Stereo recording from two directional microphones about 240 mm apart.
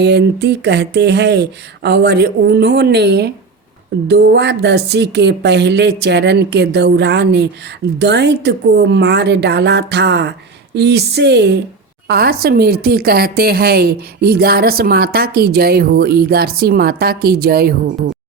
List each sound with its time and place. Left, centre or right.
0.0 s speech: right